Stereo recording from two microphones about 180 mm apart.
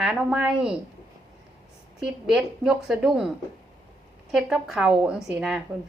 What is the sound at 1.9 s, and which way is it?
A woman's voice, 5° right (ahead or behind).